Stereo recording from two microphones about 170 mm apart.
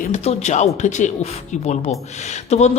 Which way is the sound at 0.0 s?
45° left (ahead or behind).